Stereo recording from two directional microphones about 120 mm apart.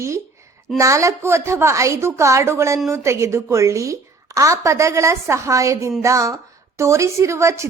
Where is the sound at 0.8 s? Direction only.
25° right (ahead or behind).